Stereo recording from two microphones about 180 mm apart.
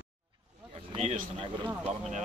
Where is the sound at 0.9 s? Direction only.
40° right (ahead or behind).